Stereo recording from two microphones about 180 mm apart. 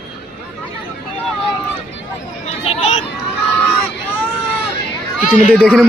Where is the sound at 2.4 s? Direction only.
35° left (ahead or behind).